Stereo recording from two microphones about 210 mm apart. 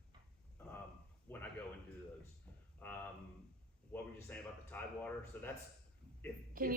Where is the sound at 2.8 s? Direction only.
5° left (ahead or behind).